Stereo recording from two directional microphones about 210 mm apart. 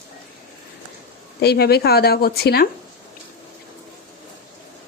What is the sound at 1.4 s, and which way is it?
Speech, 50° left (ahead or behind).